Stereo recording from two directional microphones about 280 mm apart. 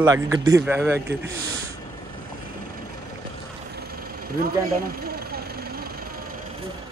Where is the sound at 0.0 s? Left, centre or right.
Centre.